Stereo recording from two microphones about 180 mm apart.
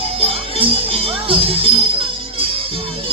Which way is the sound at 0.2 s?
30° right (ahead or behind).